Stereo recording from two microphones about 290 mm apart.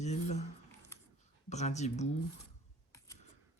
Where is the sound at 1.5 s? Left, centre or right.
Left.